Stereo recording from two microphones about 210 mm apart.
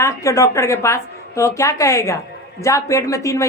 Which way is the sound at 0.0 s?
15° left (ahead or behind).